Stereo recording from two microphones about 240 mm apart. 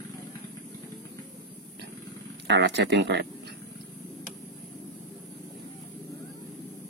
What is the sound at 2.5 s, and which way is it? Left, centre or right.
Speech, right.